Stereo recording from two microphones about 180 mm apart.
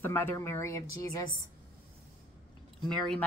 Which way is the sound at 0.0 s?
10° left (ahead or behind).